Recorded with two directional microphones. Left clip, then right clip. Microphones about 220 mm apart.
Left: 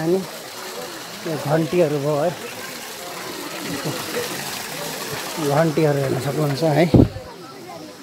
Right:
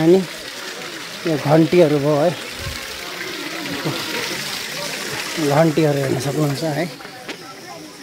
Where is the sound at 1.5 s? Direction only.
20° right (ahead or behind).